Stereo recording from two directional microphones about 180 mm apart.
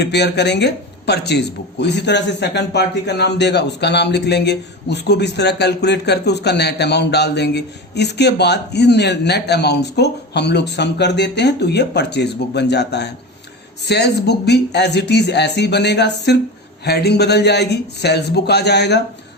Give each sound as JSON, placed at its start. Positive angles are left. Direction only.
{"t": 0.0, "sound": "speech", "side_deg": 70}